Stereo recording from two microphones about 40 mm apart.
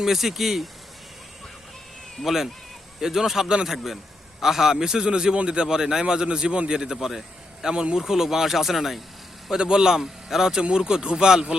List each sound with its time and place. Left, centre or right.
0.0 s speech: centre
2.2 s a man's voice: centre
7.6 s a man's voice: right; by 9.0 s centre
9.5 s a man's voice: right